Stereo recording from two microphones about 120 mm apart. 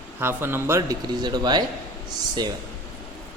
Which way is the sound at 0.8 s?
35° right (ahead or behind).